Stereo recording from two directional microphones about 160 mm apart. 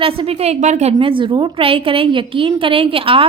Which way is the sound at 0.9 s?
30° right (ahead or behind).